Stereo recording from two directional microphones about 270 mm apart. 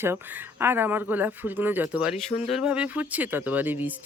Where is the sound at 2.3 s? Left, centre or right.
Left.